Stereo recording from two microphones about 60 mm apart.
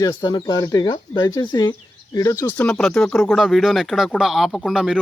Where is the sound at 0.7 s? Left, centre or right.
Left.